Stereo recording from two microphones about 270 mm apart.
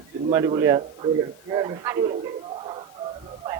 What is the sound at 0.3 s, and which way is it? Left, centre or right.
A man's voice, centre.